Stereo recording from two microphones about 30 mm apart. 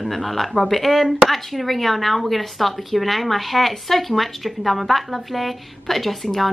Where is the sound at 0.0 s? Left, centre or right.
Centre.